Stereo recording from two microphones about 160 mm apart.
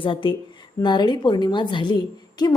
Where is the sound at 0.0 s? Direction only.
30° left (ahead or behind).